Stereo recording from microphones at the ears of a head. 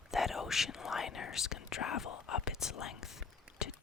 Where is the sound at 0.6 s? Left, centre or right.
Left.